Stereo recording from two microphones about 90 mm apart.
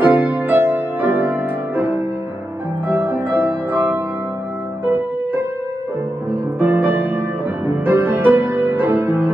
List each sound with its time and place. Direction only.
0.0 s music: 20° right (ahead or behind)
6.6 s music: 20° right (ahead or behind)